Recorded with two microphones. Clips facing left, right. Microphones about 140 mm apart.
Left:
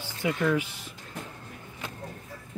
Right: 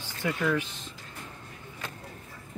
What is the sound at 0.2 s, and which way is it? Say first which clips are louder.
Speech: left 2 dB; 15° left (ahead or behind).